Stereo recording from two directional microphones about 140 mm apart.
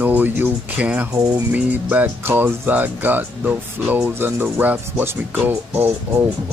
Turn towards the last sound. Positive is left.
turn(degrees=-20)  # may be behind; listen again after turning